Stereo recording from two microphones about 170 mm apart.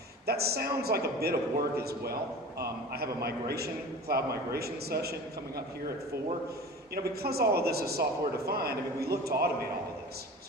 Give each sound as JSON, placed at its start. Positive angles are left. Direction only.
{"t": 0.3, "sound": "a man's voice", "side_deg": -70}
{"t": 6.9, "sound": "a man's voice", "side_deg": -65}